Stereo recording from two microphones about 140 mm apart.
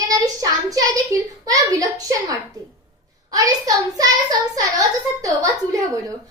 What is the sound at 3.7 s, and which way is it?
A woman's voice, 25° right (ahead or behind).